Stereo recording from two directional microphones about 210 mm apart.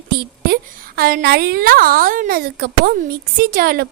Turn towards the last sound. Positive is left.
turn(degrees=-45)  # may be behind; listen again after turning